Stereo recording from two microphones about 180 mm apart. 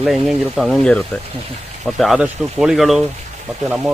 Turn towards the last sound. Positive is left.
turn(degrees=-5)  # may be behind; listen again after turning